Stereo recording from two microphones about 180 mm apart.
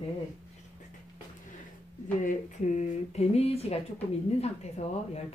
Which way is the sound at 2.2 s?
40° left (ahead or behind).